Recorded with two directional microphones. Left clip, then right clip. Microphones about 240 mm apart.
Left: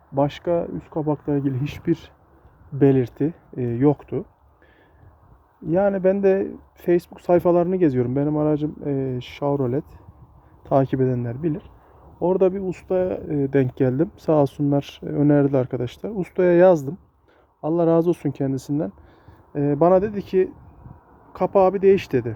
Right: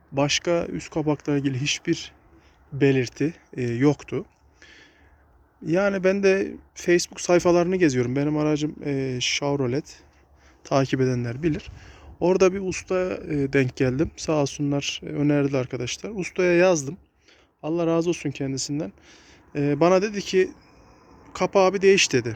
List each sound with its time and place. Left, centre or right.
0.1 s speech: centre
0.5 s speech: centre
12.7 s speech: centre
19.5 s speech: centre